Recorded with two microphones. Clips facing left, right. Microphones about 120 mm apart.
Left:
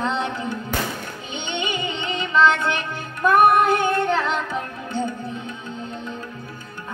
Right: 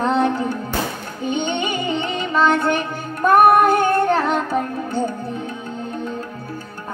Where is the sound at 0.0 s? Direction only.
45° right (ahead or behind).